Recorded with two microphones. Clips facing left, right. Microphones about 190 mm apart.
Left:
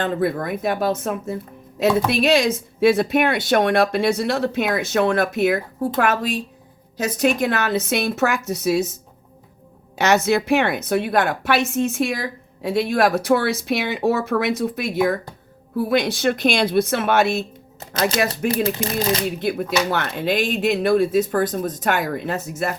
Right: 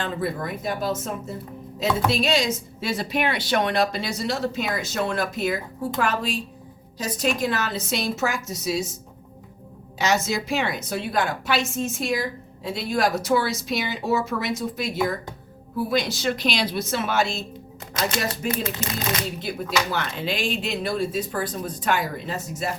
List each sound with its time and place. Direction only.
0.0 s a woman's voice: 55° left (ahead or behind)
7.0 s a woman's voice: 60° left (ahead or behind)
10.0 s a woman's voice: 65° left (ahead or behind)
18.5 s speech: 35° left (ahead or behind)
19.4 s a woman's voice: 60° left (ahead or behind)